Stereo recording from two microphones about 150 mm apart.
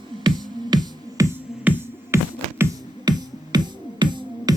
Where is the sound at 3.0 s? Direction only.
25° right (ahead or behind).